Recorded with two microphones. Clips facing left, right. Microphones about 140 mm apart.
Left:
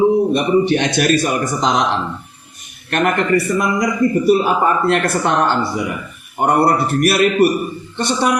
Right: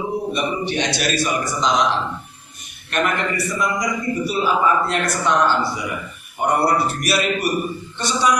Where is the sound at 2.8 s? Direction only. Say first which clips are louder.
Left 4 dB; 55° left (ahead or behind).